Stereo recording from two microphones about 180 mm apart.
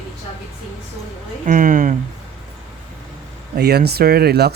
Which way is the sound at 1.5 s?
50° right (ahead or behind).